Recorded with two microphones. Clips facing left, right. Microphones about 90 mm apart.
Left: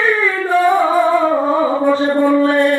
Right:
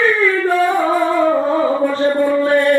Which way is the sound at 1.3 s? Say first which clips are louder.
Left 1 dB; 10° left (ahead or behind).